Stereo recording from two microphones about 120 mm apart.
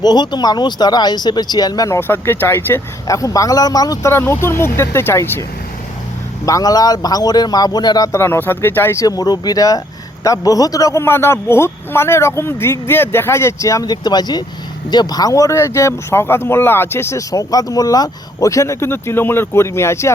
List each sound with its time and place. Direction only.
0.0 s a man's voice: 35° left (ahead or behind)
2.0 s speech: 20° left (ahead or behind)
4.1 s a man's voice: 20° left (ahead or behind)